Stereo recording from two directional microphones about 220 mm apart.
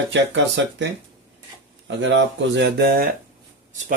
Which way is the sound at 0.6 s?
55° right (ahead or behind).